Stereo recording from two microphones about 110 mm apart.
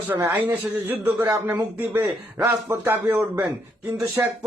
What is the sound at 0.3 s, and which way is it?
A man's voice, 20° right (ahead or behind).